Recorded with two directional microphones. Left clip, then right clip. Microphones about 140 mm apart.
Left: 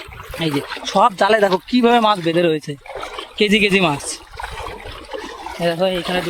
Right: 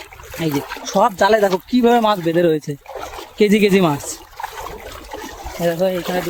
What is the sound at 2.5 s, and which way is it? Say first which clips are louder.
Speech: right 1 dB; 45° right (ahead or behind).